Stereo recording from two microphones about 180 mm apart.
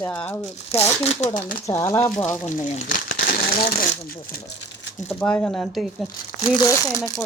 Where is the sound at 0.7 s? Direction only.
35° left (ahead or behind).